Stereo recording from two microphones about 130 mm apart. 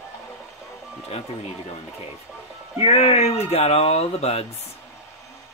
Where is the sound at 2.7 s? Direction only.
50° left (ahead or behind).